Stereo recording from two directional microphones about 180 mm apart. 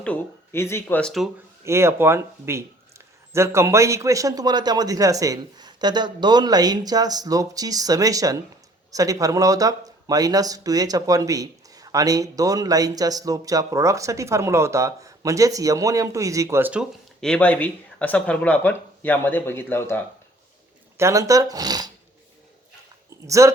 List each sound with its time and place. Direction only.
0.0 s speech: 10° left (ahead or behind)
1.6 s speech: 15° right (ahead or behind)
17.2 s speech: 5° left (ahead or behind)
21.0 s speech: 20° right (ahead or behind)
23.2 s speech: 15° right (ahead or behind)